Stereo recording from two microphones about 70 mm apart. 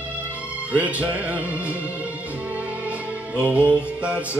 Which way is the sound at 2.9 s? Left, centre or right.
Centre.